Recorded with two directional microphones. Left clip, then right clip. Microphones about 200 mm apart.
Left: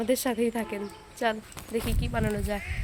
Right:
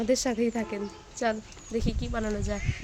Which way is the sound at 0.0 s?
10° right (ahead or behind).